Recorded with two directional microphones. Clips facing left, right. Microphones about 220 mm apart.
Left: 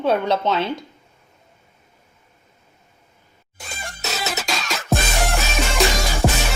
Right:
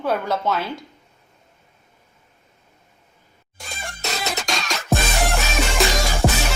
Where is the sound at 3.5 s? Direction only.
Centre (ahead or behind).